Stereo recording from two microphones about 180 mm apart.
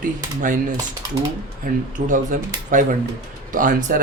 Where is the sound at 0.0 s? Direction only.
45° right (ahead or behind).